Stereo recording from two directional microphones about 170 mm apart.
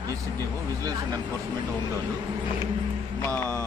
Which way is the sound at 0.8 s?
20° right (ahead or behind).